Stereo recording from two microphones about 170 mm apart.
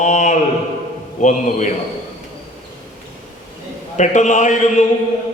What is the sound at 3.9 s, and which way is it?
Speech, 45° left (ahead or behind).